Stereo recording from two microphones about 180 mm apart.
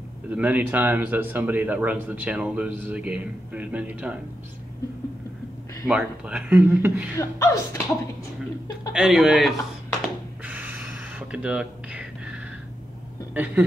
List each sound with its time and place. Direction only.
0.3 s a man's voice: 10° right (ahead or behind)
5.9 s a man's voice: 5° right (ahead or behind)
7.2 s speech: 15° left (ahead or behind)
8.9 s speech: centre (ahead or behind)
10.0 s a sound: 10° right (ahead or behind)
13.3 s a man's voice: 10° right (ahead or behind)